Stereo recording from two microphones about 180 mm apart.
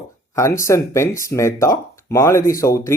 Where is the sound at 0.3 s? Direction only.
15° left (ahead or behind).